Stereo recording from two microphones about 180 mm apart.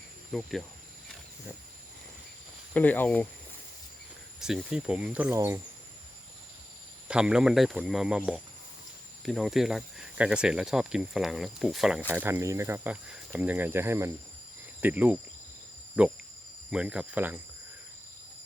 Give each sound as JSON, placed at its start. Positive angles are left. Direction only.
{"t": 0.3, "sound": "speech", "side_deg": 0}
{"t": 2.7, "sound": "speech", "side_deg": 10}
{"t": 4.4, "sound": "speech", "side_deg": -5}
{"t": 7.1, "sound": "speech", "side_deg": -5}